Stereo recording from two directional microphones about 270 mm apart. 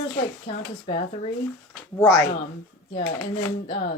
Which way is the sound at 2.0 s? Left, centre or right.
Centre.